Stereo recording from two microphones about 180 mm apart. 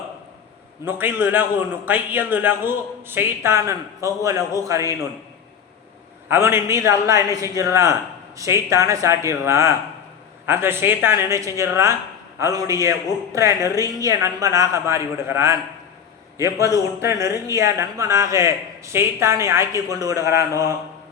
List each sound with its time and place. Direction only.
0.9 s a man's voice: 10° right (ahead or behind)
6.2 s a man's voice: 15° right (ahead or behind)